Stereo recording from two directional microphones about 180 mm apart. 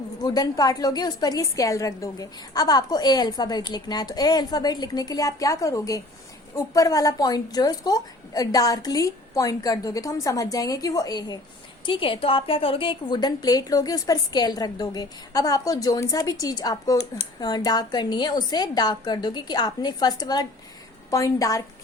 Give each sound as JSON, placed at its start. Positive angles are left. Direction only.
{"t": 0.2, "sound": "a woman's voice", "side_deg": 20}